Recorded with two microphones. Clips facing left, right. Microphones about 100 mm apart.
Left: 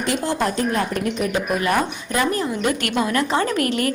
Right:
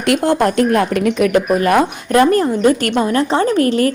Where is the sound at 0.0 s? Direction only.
60° right (ahead or behind); by 1.4 s 90° right.